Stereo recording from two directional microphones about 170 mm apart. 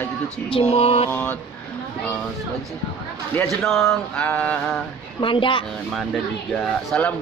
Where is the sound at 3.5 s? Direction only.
Centre (ahead or behind).